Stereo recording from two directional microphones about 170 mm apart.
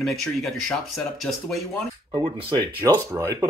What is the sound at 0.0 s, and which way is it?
Speech, centre (ahead or behind).